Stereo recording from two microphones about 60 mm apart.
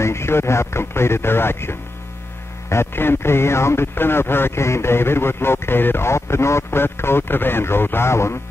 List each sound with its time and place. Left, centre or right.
0.0 s speech: left